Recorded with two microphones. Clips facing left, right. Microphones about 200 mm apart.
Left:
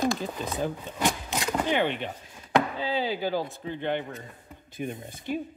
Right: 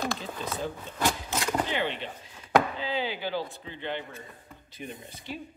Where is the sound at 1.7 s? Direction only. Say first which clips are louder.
Left 5 dB; 50° left (ahead or behind).